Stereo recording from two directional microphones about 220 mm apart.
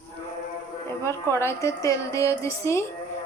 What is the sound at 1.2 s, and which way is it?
A woman's voice, 10° left (ahead or behind).